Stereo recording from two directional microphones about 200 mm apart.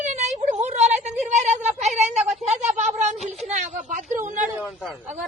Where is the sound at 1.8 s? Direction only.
35° right (ahead or behind).